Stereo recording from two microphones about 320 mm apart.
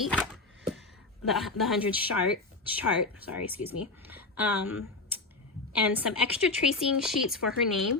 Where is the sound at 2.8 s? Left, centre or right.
Left.